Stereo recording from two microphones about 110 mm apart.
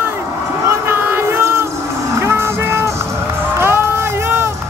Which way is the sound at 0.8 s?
20° right (ahead or behind).